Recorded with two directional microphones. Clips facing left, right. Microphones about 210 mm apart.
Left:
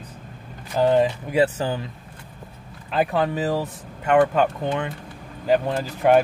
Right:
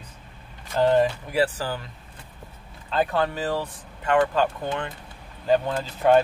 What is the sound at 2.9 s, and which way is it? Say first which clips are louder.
Speech: left 2 dB; 15° left (ahead or behind).